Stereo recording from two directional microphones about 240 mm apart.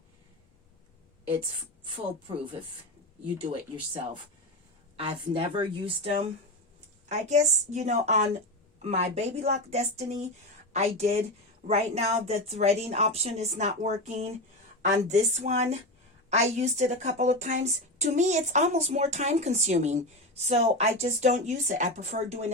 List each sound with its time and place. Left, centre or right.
4.9 s a woman's voice: right